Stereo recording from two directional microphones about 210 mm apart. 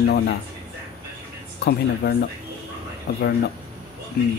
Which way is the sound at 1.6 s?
50° left (ahead or behind).